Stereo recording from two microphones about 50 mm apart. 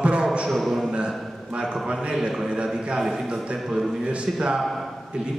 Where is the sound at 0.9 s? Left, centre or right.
Right.